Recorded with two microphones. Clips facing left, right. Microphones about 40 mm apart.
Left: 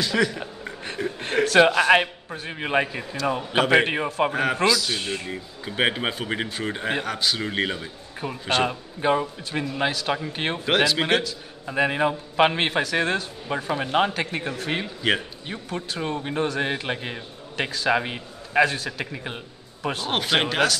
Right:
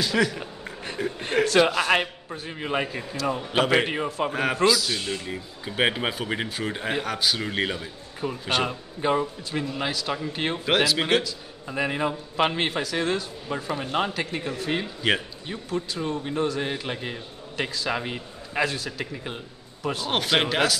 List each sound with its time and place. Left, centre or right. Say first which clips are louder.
0.0 s a man's voice: left 1 dB; centre
2.6 s a man's voice: left 4 dB; left
2.9 s a man's voice: left 2 dB; centre
3.8 s a man's voice: left 3 dB; left
4.3 s speech: right 3 dB; centre
4.9 s a man's voice: left 1 dB; centre
5.3 s a man's voice: left 1 dB; centre
10.7 s speech: left 1 dB; centre
11.7 s a man's voice: left 4 dB; centre
15.0 s speech: left 1 dB; centre
15.4 s a man's voice: right 1 dB; left
20.1 s speech: even; centre